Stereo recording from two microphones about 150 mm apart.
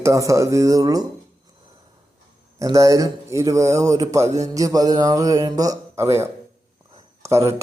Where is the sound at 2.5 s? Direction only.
20° right (ahead or behind).